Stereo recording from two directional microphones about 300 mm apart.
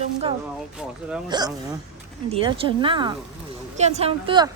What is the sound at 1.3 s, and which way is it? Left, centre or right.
A woman's voice, centre.